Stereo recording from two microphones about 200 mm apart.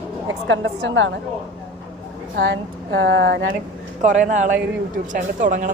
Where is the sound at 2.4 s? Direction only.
65° right (ahead or behind).